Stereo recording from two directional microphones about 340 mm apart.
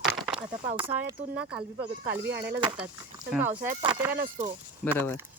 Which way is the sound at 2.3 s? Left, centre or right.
Right.